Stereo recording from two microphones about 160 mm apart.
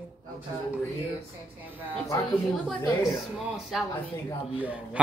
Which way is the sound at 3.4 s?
5° right (ahead or behind).